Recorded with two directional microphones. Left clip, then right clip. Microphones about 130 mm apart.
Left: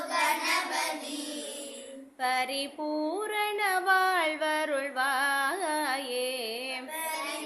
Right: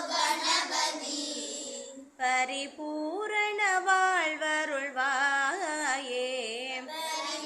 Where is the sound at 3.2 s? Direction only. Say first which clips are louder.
Right 4 dB; 30° left (ahead or behind).